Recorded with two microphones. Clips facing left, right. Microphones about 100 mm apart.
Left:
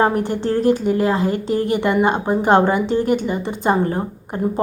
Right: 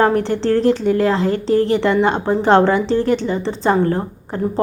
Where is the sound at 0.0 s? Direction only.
15° left (ahead or behind).